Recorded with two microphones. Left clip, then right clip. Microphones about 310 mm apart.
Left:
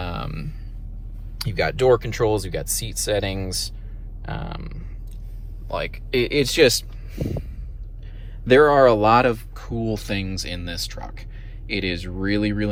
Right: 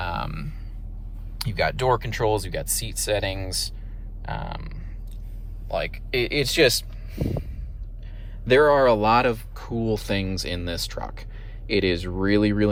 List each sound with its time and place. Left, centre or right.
0.0 s a sound: centre
1.4 s speech: centre
8.4 s speech: centre